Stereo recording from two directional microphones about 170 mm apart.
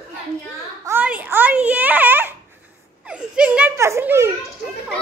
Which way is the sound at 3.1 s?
5° right (ahead or behind).